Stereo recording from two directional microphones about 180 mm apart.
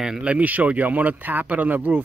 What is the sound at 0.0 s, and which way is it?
Speech, 5° right (ahead or behind).